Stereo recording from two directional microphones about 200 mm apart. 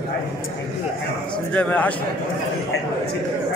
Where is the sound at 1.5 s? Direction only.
5° left (ahead or behind).